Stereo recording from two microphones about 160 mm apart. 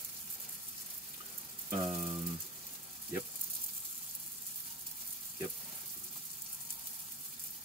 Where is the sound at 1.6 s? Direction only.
45° right (ahead or behind).